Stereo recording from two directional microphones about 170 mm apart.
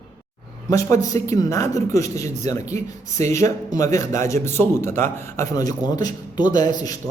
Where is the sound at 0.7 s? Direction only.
20° left (ahead or behind).